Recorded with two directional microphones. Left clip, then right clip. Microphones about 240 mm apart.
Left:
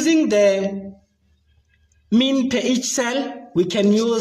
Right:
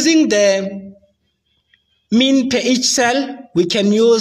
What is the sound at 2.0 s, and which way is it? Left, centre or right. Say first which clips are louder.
Speech: right 4 dB; right.